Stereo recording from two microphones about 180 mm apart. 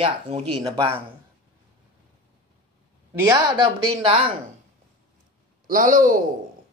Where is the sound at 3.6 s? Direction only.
30° right (ahead or behind).